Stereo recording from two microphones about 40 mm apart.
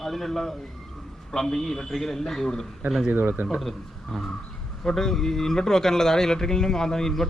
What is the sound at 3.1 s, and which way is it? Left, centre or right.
Speech, right.